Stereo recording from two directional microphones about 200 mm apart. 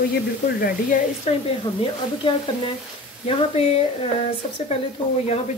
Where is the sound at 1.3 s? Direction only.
30° left (ahead or behind).